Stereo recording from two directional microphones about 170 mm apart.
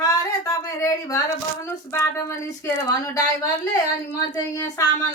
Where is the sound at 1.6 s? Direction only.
15° left (ahead or behind).